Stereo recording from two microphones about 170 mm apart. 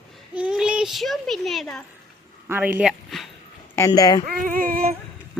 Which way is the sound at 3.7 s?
20° left (ahead or behind).